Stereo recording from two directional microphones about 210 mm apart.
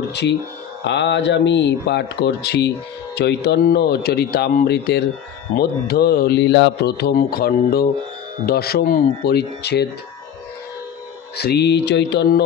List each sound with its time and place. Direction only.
0.1 s speech: 55° left (ahead or behind)
11.3 s speech: 50° left (ahead or behind)